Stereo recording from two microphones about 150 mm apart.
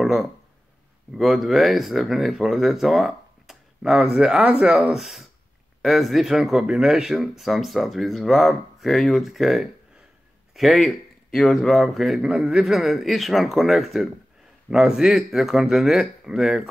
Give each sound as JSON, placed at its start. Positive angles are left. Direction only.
{"t": 0.0, "sound": "speech", "side_deg": 0}